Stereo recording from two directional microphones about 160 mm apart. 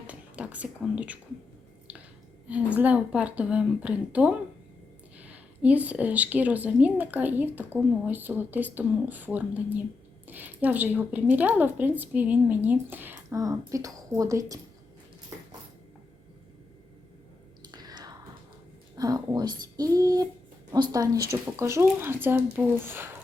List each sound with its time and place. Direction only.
0.1 s speech: 10° right (ahead or behind)
1.9 s a sound: 10° right (ahead or behind)
2.7 s a woman's voice: 10° right (ahead or behind)
17.7 s chewing: 25° right (ahead or behind)
18.9 s a woman's voice: 25° right (ahead or behind)